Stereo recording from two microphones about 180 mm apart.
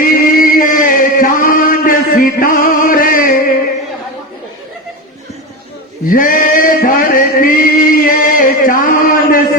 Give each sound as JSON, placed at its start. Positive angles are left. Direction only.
{"t": 0.0, "sound": "chant", "side_deg": 50}
{"t": 6.1, "sound": "chant", "side_deg": 50}